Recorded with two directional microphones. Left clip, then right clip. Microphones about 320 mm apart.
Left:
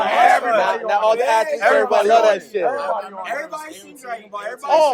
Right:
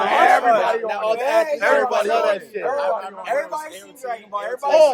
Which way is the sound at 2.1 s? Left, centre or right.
Left.